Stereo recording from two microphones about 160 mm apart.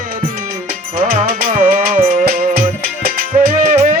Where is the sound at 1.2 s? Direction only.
60° right (ahead or behind).